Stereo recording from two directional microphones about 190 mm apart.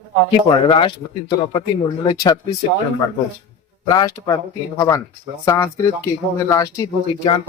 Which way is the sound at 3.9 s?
20° left (ahead or behind).